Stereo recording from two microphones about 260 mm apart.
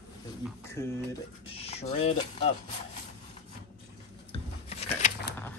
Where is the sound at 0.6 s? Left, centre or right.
Centre.